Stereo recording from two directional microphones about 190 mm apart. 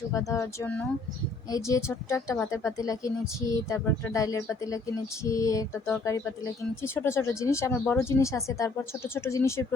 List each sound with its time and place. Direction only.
0.1 s speech: 15° left (ahead or behind)